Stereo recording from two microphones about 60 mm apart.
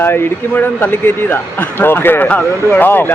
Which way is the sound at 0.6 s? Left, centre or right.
Left.